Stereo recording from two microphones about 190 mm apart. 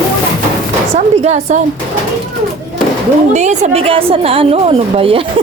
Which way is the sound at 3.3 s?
40° right (ahead or behind).